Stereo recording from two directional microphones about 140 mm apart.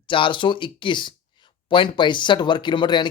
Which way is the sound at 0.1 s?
35° left (ahead or behind).